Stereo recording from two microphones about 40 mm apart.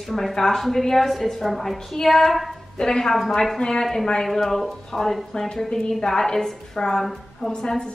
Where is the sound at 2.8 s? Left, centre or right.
Centre.